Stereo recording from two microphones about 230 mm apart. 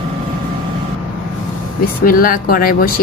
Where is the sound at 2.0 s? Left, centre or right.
Left.